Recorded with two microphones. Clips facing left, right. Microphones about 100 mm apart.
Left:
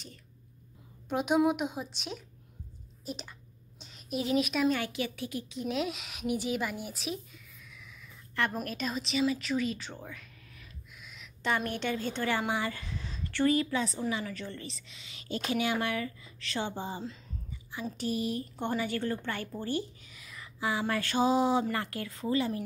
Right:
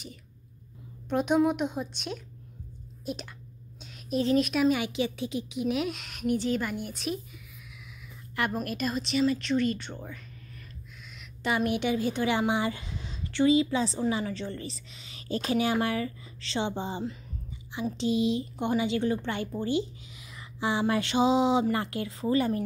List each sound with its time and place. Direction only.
1.0 s speech: 5° left (ahead or behind)
3.8 s a sound: centre (ahead or behind)
4.2 s speech: 5° left (ahead or behind)
4.6 s a woman's voice: 15° right (ahead or behind)
5.7 s speech: centre (ahead or behind)
8.5 s a woman's voice: centre (ahead or behind)
21.7 s a woman's voice: 30° right (ahead or behind)